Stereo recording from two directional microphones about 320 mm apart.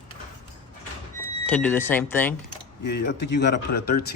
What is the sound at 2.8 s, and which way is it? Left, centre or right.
Speech, left.